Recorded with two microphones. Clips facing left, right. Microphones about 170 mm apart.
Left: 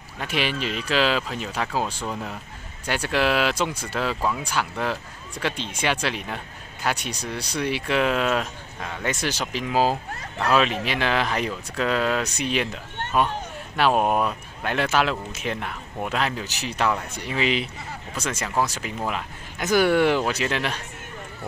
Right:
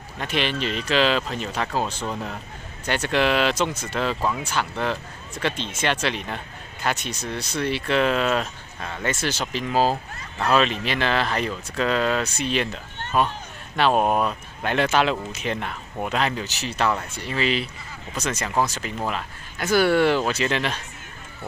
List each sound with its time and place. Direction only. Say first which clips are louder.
0.2 s speech: right 1 dB; 10° left (ahead or behind)
16.4 s speech: right 1 dB; 15° left (ahead or behind)